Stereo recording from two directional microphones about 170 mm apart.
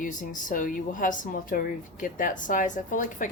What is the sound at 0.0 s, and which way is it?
A woman's voice, 50° left (ahead or behind).